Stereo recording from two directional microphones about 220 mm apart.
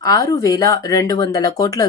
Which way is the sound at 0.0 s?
15° left (ahead or behind).